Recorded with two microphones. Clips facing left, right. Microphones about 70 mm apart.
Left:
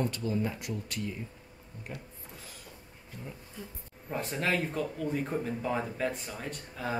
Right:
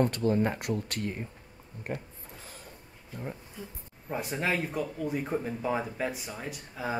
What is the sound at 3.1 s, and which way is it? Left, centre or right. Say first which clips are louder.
Speech: right 6 dB; right.